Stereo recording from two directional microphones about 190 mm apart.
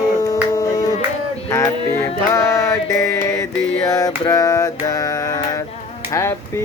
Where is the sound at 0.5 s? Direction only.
20° left (ahead or behind).